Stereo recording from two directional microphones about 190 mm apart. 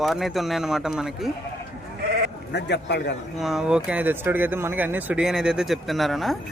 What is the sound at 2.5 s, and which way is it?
Speech, 60° left (ahead or behind).